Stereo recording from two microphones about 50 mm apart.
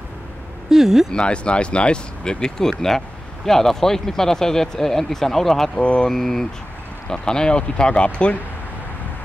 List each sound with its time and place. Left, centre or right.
0.7 s speech: centre
1.1 s speech: left
5.8 s speech: left
6.0 s speech: centre